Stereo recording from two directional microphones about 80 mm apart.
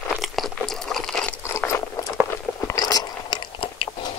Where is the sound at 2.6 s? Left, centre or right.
Left.